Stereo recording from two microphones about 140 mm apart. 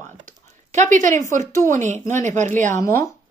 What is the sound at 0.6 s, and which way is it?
Speech, 60° right (ahead or behind).